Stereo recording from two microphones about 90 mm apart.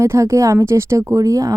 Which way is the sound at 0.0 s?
35° right (ahead or behind).